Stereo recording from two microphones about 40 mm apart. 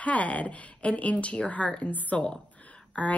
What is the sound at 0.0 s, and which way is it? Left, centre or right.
A woman's voice, left.